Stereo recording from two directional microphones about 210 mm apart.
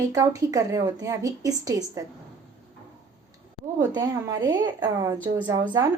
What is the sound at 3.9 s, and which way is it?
A woman's voice, 20° right (ahead or behind).